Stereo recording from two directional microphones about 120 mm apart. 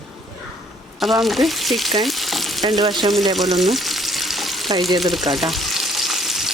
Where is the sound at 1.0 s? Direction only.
Centre (ahead or behind).